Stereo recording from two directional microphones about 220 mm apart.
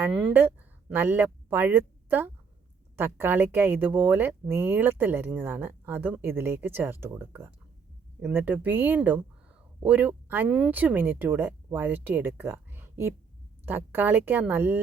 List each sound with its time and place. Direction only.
0.0 s speech: 5° right (ahead or behind)